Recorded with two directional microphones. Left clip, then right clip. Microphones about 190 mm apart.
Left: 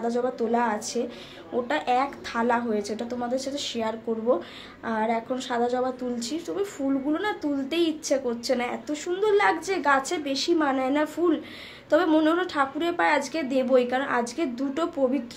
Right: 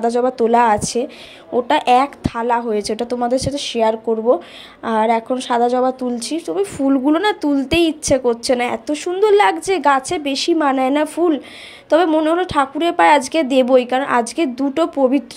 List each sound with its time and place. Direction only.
0.0 s speech: 40° right (ahead or behind)